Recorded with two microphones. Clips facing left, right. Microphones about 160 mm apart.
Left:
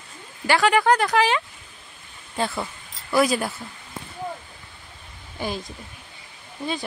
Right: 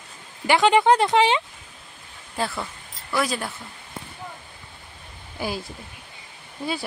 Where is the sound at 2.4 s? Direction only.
5° right (ahead or behind).